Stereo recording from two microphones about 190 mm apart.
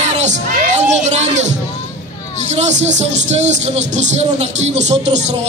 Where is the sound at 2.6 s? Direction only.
40° right (ahead or behind).